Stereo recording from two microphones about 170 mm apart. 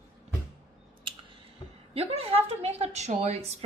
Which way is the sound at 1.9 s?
35° right (ahead or behind).